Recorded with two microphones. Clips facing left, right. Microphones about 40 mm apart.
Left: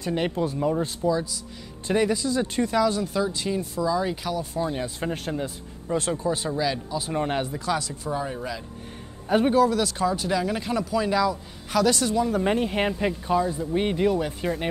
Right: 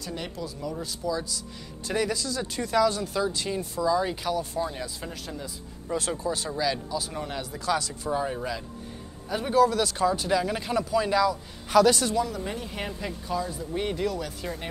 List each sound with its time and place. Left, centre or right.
0.0 s speech: left
1.9 s speech: left; by 4.5 s centre
4.8 s speech: left
5.9 s speech: left
7.0 s speech: left
7.5 s speech: centre
12.3 s speech: left